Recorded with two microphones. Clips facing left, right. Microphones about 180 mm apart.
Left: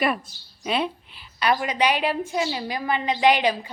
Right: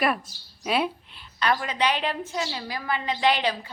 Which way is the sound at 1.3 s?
15° left (ahead or behind).